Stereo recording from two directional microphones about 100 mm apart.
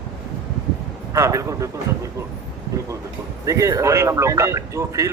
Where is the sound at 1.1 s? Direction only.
30° right (ahead or behind).